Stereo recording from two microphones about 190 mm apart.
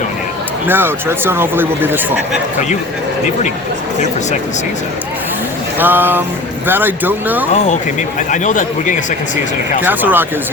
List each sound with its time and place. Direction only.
0.7 s speech: 10° right (ahead or behind)
5.8 s speech: 10° right (ahead or behind)
7.5 s speech: 40° left (ahead or behind)
9.8 s speech: 10° right (ahead or behind)